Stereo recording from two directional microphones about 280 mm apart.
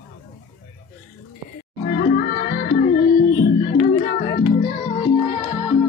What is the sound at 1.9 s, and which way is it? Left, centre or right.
Music, centre.